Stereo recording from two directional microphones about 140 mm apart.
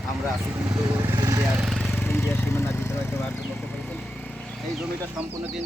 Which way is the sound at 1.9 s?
15° left (ahead or behind).